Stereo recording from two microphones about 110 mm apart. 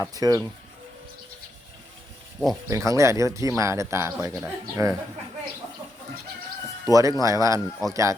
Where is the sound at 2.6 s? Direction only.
30° right (ahead or behind).